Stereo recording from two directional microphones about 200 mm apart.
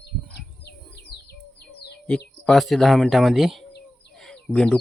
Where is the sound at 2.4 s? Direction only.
Centre (ahead or behind).